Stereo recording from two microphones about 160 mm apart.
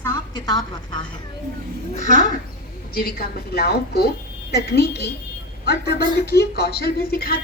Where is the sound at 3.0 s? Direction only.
70° left (ahead or behind).